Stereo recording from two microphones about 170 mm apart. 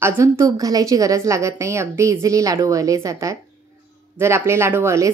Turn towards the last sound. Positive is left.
turn(degrees=-15)  # may be behind; listen again after turning